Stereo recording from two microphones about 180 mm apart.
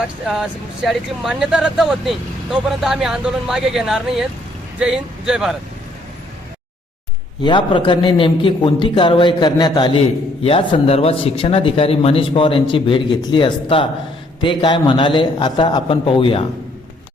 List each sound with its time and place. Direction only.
0.0 s speech: 5° right (ahead or behind)
7.4 s speech: 25° left (ahead or behind)